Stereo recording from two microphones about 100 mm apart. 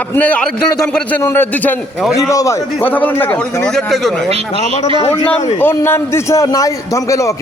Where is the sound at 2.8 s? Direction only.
20° left (ahead or behind).